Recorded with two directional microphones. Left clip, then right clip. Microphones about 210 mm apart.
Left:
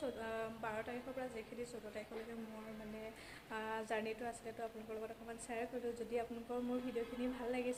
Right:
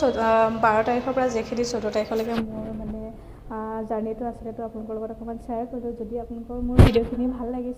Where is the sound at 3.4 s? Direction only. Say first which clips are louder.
Right 13 dB; 20° left (ahead or behind).